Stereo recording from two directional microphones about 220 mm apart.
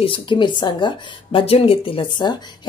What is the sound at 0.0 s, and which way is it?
Speech, 25° left (ahead or behind).